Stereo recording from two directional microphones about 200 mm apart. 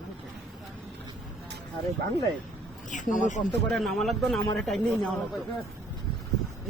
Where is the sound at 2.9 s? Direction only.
40° left (ahead or behind).